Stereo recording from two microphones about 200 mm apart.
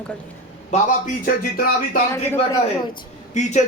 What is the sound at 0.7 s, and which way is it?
Speech, 45° left (ahead or behind).